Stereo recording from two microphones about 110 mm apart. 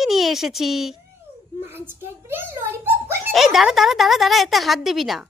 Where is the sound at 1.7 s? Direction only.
20° right (ahead or behind).